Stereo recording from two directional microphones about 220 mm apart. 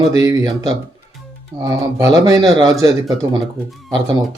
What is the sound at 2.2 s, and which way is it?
Speech, 15° right (ahead or behind).